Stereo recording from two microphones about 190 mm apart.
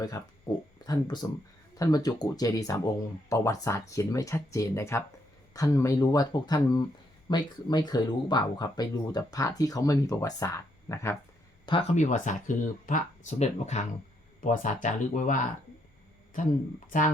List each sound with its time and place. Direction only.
0.2 s speech: 20° left (ahead or behind)
11.6 s speech: 25° left (ahead or behind)
11.9 s speech: 40° left (ahead or behind)